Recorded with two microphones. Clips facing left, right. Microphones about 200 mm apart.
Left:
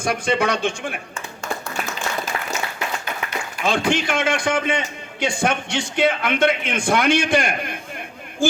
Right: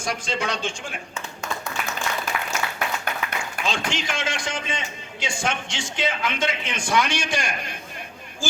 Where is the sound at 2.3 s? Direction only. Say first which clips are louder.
Left 1 dB; 35° left (ahead or behind).